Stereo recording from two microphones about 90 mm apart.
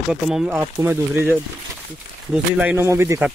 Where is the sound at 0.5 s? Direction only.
25° right (ahead or behind).